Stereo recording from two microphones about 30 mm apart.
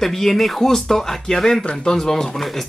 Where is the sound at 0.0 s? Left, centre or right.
Centre.